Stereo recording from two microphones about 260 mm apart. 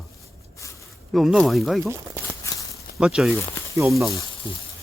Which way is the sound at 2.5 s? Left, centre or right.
Centre.